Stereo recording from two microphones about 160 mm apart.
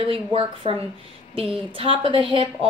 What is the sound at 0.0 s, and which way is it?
A woman's voice, 35° right (ahead or behind).